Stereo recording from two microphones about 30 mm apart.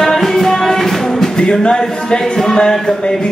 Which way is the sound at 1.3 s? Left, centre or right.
Left.